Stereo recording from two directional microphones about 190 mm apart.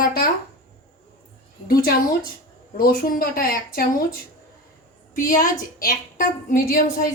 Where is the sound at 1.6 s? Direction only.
50° left (ahead or behind).